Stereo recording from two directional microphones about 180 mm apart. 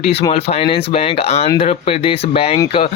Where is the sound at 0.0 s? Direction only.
35° left (ahead or behind).